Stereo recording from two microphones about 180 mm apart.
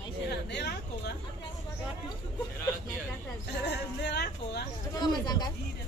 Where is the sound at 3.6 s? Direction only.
70° left (ahead or behind).